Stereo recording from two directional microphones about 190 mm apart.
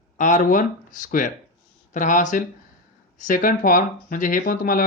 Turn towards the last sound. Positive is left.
turn(degrees=50)  # may be behind; listen again after turning